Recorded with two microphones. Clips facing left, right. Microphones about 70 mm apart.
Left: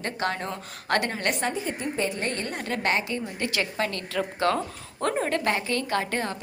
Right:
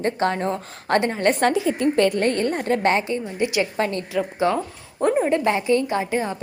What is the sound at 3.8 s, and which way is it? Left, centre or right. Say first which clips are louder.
Speech: right 5 dB; right.